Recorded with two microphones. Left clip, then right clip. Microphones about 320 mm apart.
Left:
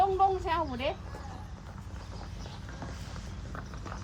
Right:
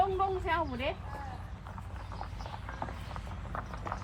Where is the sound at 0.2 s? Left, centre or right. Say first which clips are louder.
Left 4 dB; centre.